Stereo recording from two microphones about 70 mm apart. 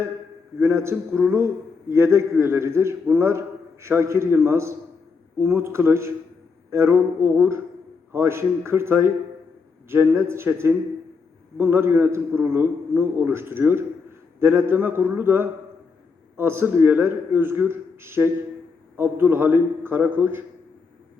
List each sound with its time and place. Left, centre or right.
0.6 s a man's voice: right